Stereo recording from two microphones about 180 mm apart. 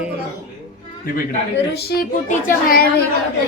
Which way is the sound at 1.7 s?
60° left (ahead or behind).